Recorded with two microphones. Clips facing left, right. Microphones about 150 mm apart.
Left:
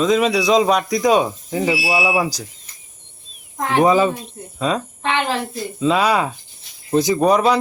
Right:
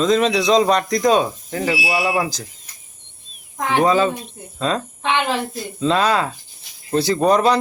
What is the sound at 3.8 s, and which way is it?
Speech, 10° left (ahead or behind).